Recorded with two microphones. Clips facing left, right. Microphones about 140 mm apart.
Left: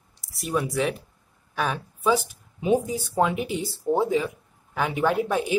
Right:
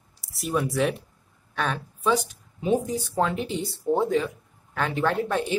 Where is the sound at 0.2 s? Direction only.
Centre (ahead or behind).